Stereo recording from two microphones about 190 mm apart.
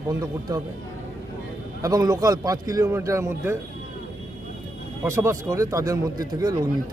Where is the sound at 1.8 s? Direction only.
20° right (ahead or behind).